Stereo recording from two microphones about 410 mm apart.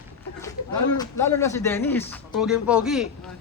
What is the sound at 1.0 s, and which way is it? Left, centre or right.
A man's voice, centre.